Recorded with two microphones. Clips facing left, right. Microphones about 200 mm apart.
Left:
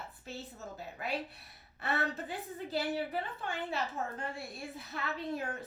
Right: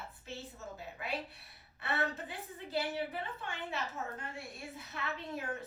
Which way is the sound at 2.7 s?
35° left (ahead or behind).